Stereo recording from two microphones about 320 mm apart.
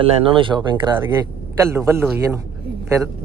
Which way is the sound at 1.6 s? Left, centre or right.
Centre.